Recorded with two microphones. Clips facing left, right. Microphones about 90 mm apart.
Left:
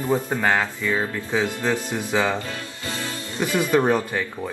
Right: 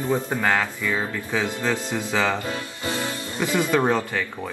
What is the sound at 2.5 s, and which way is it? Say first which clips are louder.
Music: right 3 dB; 20° right (ahead or behind).